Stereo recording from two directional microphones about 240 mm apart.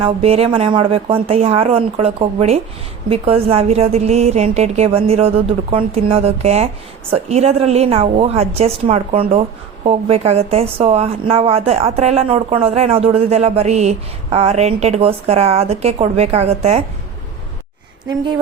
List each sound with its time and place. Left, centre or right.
0.0 s speech: right